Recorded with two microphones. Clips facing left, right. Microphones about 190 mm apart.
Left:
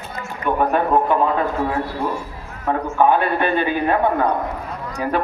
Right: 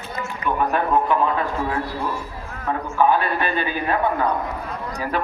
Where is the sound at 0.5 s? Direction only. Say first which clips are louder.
Left 3 dB; 45° left (ahead or behind).